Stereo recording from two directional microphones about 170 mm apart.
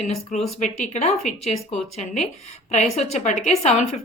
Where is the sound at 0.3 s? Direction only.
45° left (ahead or behind).